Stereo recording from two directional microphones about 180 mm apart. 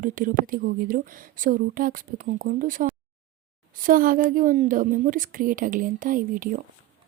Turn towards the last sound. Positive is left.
turn(degrees=-50)  # may be behind; listen again after turning